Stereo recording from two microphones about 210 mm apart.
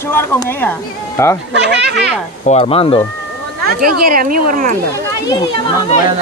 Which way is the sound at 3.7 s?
45° right (ahead or behind).